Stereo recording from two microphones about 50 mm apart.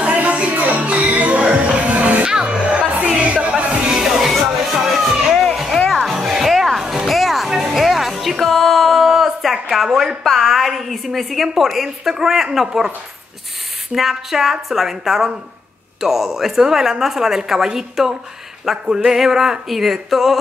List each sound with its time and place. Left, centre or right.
0.0 s music: right
2.2 s music: centre
4.0 s music: centre
6.1 s music: centre
10.2 s a woman's voice: centre
13.9 s a woman's voice: centre
18.7 s music: centre